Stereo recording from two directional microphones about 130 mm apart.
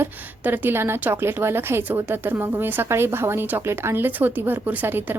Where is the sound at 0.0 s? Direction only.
15° right (ahead or behind).